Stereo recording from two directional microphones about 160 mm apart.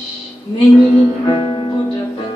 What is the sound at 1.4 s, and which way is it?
Music, 35° left (ahead or behind).